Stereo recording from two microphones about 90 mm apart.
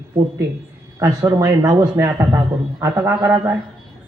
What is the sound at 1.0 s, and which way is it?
Speech, 40° right (ahead or behind).